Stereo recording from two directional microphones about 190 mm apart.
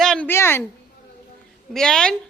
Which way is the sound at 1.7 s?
5° left (ahead or behind).